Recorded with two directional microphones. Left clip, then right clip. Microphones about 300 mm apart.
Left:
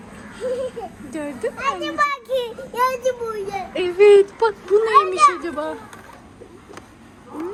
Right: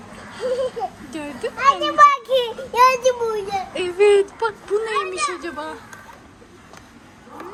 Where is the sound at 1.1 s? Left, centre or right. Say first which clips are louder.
Left 2 dB; centre.